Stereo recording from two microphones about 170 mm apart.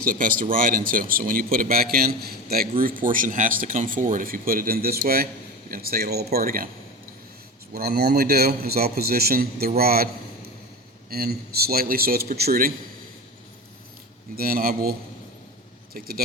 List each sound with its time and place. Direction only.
0.0 s speech: 55° right (ahead or behind)
7.7 s speech: 65° right (ahead or behind)
11.1 s speech: 65° right (ahead or behind)
14.3 s speech: 60° right (ahead or behind)